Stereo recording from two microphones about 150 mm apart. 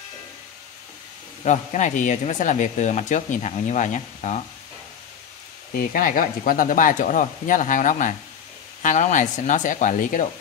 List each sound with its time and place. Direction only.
1.4 s speech: 55° left (ahead or behind)
5.8 s speech: 70° left (ahead or behind)